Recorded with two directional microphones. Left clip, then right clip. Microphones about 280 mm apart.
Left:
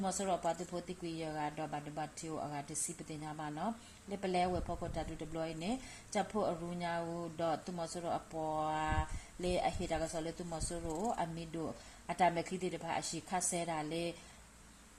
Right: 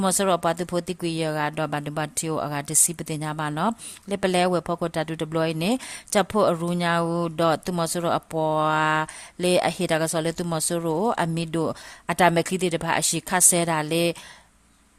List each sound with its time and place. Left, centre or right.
0.0 s speech: right